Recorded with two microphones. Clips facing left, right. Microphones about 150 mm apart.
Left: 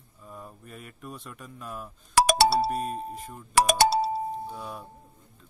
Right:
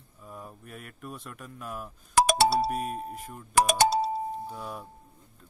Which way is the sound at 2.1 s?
80° left.